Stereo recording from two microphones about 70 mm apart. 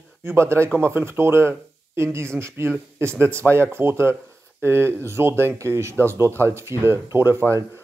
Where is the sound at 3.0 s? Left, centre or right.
Right.